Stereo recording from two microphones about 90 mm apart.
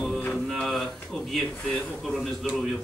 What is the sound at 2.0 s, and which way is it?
Speech, 5° left (ahead or behind).